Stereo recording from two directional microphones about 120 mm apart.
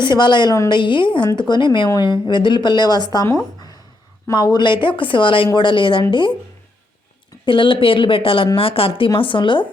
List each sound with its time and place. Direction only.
0.1 s speech: 40° left (ahead or behind)
4.3 s speech: 35° left (ahead or behind)
7.4 s speech: 45° left (ahead or behind)